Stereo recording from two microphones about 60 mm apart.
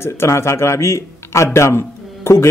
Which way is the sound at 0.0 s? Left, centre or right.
Left.